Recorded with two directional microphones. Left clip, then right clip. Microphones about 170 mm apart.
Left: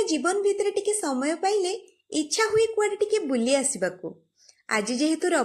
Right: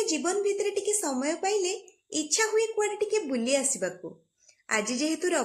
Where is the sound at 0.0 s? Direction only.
20° left (ahead or behind).